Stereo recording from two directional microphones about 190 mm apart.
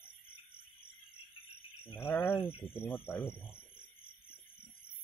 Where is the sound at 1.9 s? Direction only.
10° left (ahead or behind).